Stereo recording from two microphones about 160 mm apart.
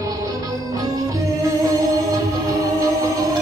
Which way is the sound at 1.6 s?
20° right (ahead or behind).